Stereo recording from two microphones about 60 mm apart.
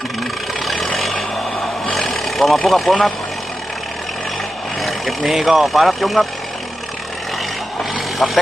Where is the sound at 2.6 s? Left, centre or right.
Centre.